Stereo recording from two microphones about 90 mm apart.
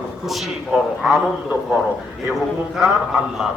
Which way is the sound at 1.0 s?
5° right (ahead or behind).